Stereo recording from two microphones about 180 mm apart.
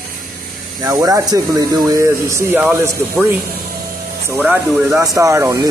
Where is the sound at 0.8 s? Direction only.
15° right (ahead or behind).